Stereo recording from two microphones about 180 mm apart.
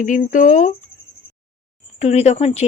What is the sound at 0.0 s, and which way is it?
Speech, 45° left (ahead or behind).